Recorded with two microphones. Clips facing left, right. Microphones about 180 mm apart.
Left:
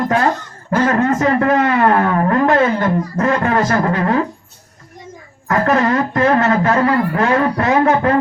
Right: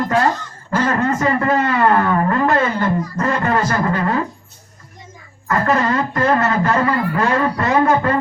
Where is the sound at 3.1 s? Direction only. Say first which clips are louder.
Left 3 dB; 55° left (ahead or behind).